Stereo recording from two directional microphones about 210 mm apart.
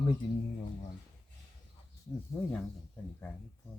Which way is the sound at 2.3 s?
10° left (ahead or behind).